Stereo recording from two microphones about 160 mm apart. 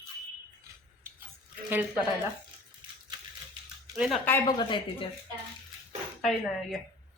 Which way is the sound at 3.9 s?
Centre (ahead or behind).